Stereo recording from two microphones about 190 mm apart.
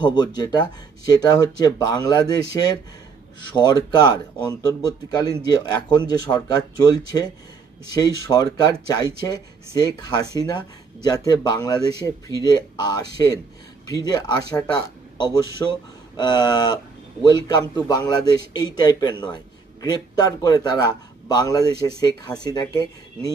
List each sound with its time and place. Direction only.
0.0 s a man's voice: 20° left (ahead or behind)
7.9 s a man's voice: 20° left (ahead or behind)